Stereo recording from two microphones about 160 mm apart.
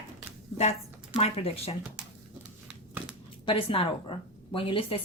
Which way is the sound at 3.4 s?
35° left (ahead or behind).